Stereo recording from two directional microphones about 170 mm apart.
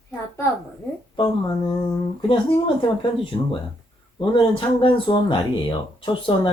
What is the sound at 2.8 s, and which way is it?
Speech, 30° left (ahead or behind).